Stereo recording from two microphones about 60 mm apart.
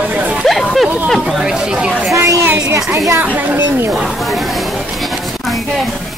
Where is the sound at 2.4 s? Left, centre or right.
Right.